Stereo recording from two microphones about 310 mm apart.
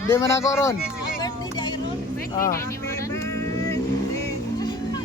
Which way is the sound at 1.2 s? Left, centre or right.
Centre.